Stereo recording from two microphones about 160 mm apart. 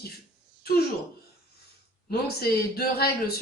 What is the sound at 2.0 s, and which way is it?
Speech, 75° left (ahead or behind).